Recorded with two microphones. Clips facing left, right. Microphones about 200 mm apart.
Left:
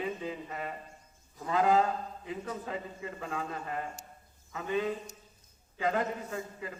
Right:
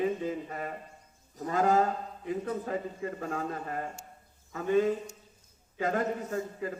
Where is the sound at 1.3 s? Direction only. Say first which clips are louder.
Right 1 dB; 40° right (ahead or behind).